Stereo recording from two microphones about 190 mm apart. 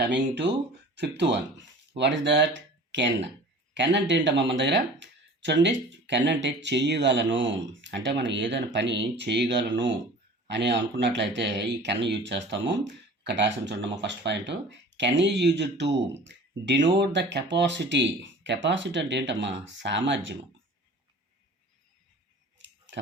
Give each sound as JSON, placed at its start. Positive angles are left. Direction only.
{"t": 0.0, "sound": "speech", "side_deg": -65}
{"t": 22.5, "sound": "scissors", "side_deg": -70}